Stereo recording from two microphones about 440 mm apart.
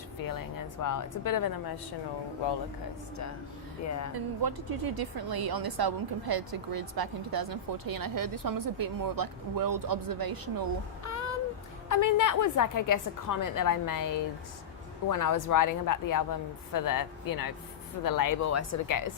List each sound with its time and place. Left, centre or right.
0.3 s a woman's voice: left
3.8 s speech: left
4.1 s a woman's voice: right
11.0 s a sound: left
11.9 s a woman's voice: left